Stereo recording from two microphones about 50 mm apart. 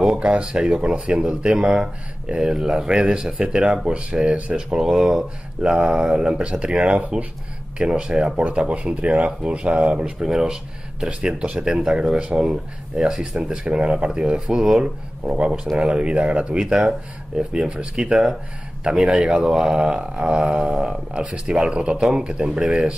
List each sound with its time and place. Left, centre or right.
0.0 s speech: right
1.6 s speech: centre; by 4.6 s right
4.6 s speech: centre
13.4 s speech: right
15.2 s speech: right
16.6 s speech: centre